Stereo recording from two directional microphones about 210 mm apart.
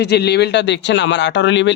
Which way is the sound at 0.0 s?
50° left (ahead or behind).